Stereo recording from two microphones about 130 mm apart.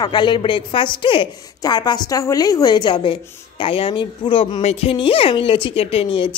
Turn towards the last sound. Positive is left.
turn(degrees=40)  # may be behind; listen again after turning